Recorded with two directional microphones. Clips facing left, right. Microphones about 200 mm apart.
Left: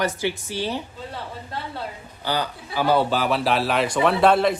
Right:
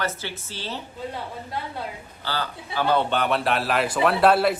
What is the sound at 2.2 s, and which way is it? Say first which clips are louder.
Speech: left 4 dB; 15° left (ahead or behind).